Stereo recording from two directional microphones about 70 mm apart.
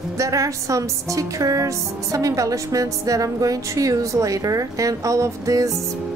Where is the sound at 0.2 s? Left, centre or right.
Right.